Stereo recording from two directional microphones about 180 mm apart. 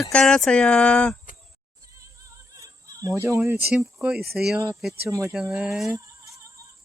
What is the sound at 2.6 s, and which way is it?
Speech, 20° right (ahead or behind).